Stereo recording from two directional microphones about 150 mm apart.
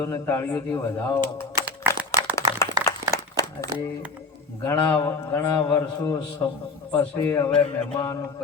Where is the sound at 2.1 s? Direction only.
20° left (ahead or behind).